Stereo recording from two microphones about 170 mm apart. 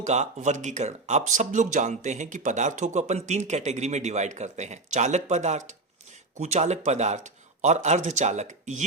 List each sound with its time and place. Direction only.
0.0 s speech: 45° right (ahead or behind)